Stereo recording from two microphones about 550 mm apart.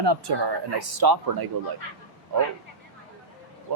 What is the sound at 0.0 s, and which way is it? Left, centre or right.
Speech, right.